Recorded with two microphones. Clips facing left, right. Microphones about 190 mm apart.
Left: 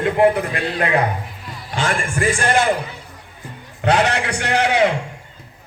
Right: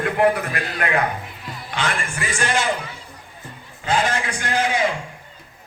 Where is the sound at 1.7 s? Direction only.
45° left (ahead or behind).